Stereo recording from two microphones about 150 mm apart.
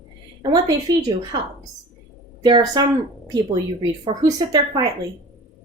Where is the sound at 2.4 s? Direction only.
30° right (ahead or behind).